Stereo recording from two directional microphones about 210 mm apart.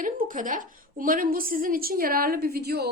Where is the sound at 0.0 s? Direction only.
40° right (ahead or behind).